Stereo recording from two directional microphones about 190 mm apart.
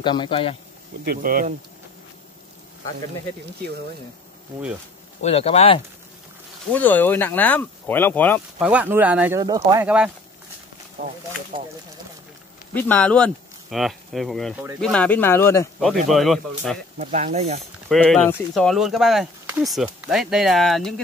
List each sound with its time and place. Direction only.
0.0 s speech: 25° left (ahead or behind)
1.0 s speech: 45° right (ahead or behind)
5.2 s speech: 30° left (ahead or behind)
6.7 s speech: 10° left (ahead or behind)
8.5 s speech: 5° right (ahead or behind)
9.4 s speech: 20° right (ahead or behind)
9.8 s speech: 5° right (ahead or behind)
11.5 s speech: 25° right (ahead or behind)
12.7 s speech: 10° left (ahead or behind)
16.1 s speech: centre (ahead or behind)
17.0 s speech: 35° right (ahead or behind)
17.8 s speech: centre (ahead or behind)